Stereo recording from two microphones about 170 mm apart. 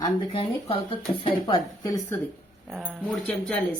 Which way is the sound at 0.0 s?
30° left (ahead or behind).